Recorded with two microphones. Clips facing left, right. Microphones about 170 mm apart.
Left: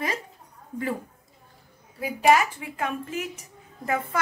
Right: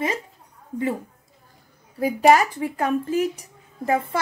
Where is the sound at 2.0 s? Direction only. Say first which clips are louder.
Right 4 dB; 40° right (ahead or behind).